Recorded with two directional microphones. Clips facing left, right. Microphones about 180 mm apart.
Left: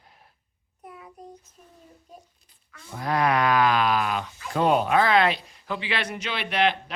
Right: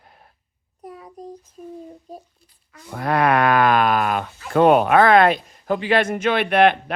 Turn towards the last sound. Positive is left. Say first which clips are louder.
# right 8 dB
turn(degrees=-55)  # may be behind; listen again after turning